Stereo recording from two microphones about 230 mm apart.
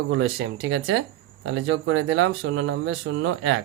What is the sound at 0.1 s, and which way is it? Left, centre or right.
Speech, right.